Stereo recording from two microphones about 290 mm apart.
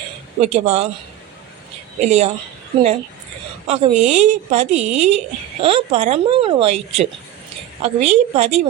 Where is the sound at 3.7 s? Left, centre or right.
Right.